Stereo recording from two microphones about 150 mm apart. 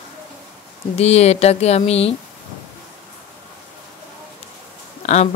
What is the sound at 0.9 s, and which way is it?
Speech, 45° left (ahead or behind).